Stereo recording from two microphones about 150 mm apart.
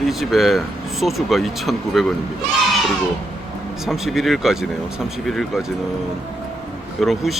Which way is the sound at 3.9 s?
Centre (ahead or behind).